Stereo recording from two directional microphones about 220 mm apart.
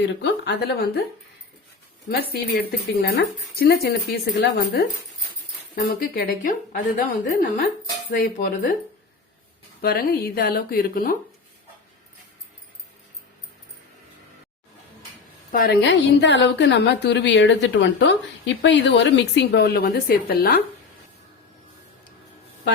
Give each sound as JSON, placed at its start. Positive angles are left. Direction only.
{"t": 0.2, "sound": "a woman's voice", "side_deg": 50}
{"t": 2.0, "sound": "a woman's voice", "side_deg": 45}
{"t": 8.1, "sound": "speech", "side_deg": 40}
{"t": 9.8, "sound": "a woman's voice", "side_deg": 45}
{"t": 15.5, "sound": "a woman's voice", "side_deg": 45}